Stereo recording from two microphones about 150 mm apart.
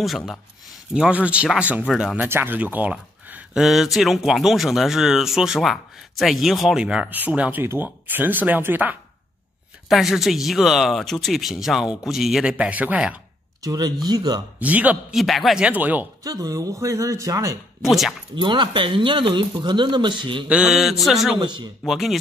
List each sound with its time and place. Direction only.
0.0 s speech: centre (ahead or behind)
9.8 s speech: centre (ahead or behind)
13.6 s speech: 25° right (ahead or behind)
14.6 s speech: 10° right (ahead or behind)
16.3 s speech: 25° right (ahead or behind)
17.8 s speech: centre (ahead or behind)
18.3 s speech: 30° right (ahead or behind)
20.4 s speech: 5° right (ahead or behind)
21.4 s speech: 30° right (ahead or behind)
21.8 s speech: centre (ahead or behind)